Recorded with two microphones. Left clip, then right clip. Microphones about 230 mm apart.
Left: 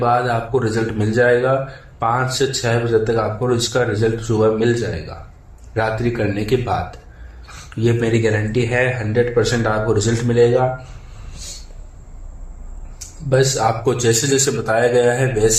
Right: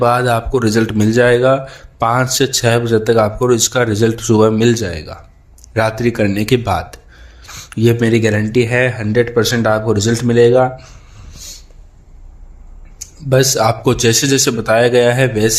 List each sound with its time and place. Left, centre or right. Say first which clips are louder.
0.0 s speech: right 4 dB; right
13.0 s speech: right 3 dB; right